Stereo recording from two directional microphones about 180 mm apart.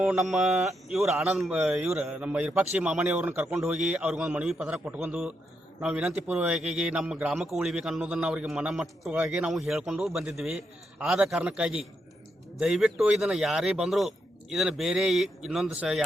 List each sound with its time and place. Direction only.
0.0 s a man's voice: centre (ahead or behind)